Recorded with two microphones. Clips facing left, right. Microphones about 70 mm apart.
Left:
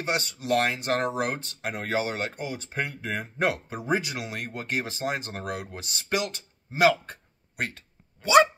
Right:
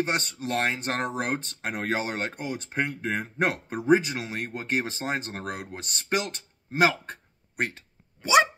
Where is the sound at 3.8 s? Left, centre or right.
Right.